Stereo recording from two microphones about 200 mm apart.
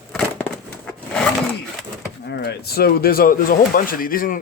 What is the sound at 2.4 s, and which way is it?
Speech, 50° left (ahead or behind).